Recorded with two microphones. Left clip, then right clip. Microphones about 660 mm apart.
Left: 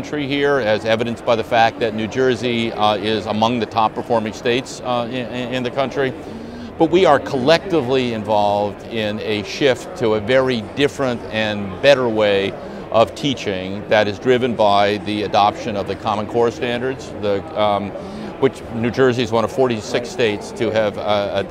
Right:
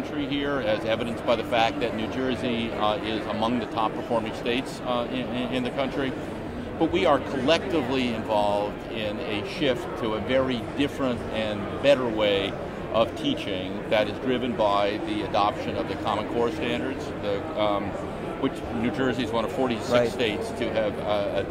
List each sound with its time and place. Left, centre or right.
0.2 s a man's voice: left